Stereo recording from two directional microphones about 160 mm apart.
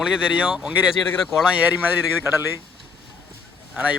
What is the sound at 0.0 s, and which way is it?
Speech, 5° right (ahead or behind).